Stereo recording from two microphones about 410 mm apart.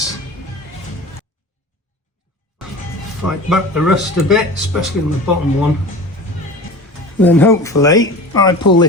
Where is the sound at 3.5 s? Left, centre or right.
Centre.